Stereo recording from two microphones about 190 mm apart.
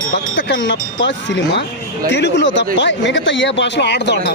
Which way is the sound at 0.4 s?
70° left (ahead or behind).